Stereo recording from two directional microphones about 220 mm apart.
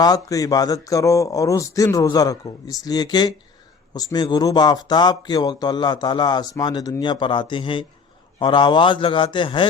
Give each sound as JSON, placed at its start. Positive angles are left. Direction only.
{"t": 0.3, "sound": "speech", "side_deg": 15}